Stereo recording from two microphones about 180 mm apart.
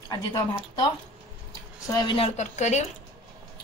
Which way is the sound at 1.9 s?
30° left (ahead or behind).